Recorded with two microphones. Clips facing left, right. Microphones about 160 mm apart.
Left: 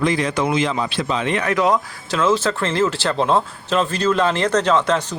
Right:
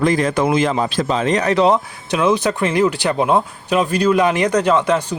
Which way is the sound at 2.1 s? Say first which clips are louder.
Right 2 dB; 15° right (ahead or behind).